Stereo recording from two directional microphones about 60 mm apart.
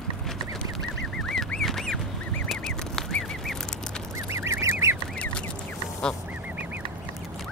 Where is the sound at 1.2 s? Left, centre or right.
Centre.